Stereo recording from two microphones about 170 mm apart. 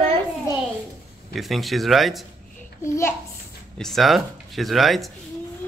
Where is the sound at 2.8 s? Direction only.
15° left (ahead or behind).